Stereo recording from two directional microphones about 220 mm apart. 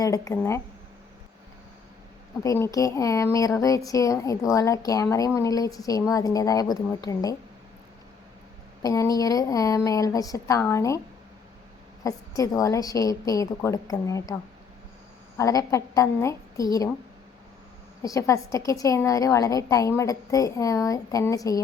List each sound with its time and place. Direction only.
0.0 s a woman's voice: 15° left (ahead or behind)
2.4 s a woman's voice: 15° left (ahead or behind)
8.8 s a woman's voice: 15° left (ahead or behind)
12.0 s a woman's voice: 15° left (ahead or behind)
15.4 s a woman's voice: 15° left (ahead or behind)
18.0 s a woman's voice: 15° left (ahead or behind)